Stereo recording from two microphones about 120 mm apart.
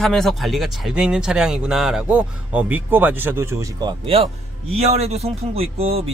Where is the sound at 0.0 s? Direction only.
5° left (ahead or behind); by 3.7 s 20° right (ahead or behind).